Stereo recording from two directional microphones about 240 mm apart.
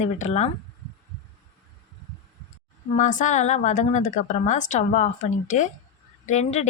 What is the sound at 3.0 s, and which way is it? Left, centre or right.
A woman's voice, left.